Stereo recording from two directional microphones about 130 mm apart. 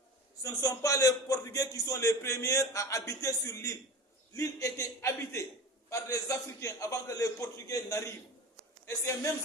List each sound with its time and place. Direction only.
0.4 s a man's voice: 25° left (ahead or behind)